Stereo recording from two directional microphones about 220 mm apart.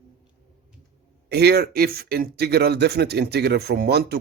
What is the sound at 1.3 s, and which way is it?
Speech, 45° right (ahead or behind).